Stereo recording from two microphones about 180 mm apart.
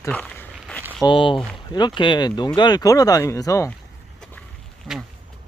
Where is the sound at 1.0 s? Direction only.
30° left (ahead or behind).